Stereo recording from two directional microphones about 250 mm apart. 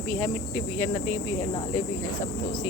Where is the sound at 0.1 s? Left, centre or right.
Centre.